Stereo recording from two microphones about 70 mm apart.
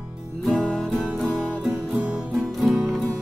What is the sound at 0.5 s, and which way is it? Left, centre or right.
Music, centre.